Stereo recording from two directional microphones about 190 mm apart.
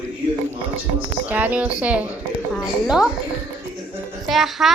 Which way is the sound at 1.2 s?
10° right (ahead or behind).